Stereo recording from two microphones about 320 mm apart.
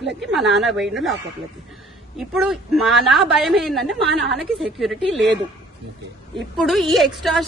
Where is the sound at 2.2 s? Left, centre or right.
Centre.